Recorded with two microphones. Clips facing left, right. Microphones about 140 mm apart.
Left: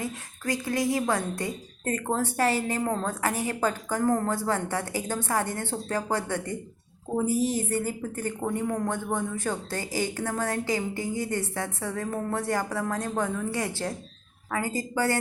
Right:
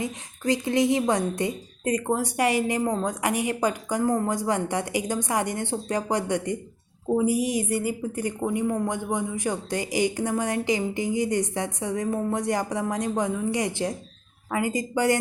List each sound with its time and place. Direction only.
0.0 s speech: 20° right (ahead or behind)